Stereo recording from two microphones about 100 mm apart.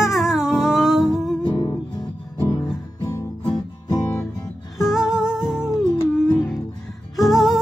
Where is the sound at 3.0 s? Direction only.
30° left (ahead or behind).